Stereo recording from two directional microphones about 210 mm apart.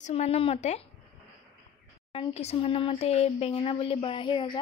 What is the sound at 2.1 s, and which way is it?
A child's voice, 25° left (ahead or behind).